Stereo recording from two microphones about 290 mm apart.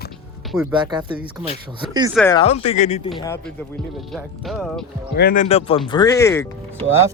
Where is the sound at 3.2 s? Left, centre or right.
Centre.